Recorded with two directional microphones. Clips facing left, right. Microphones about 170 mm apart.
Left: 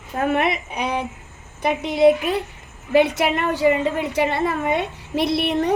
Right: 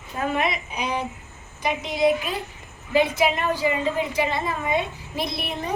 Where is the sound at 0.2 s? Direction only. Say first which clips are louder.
Left 4 dB; 60° left (ahead or behind).